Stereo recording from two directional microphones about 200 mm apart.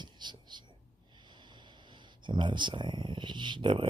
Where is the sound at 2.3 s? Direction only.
25° right (ahead or behind).